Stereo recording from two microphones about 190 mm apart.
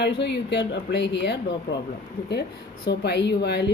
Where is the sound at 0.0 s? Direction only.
65° left (ahead or behind).